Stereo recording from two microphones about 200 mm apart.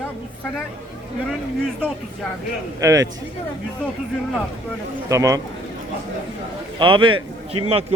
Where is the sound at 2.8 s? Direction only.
15° right (ahead or behind).